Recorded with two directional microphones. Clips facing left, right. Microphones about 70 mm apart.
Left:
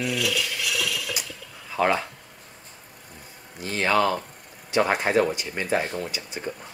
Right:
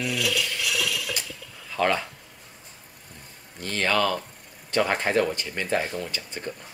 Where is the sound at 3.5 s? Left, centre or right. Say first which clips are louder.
Left 2 dB; centre.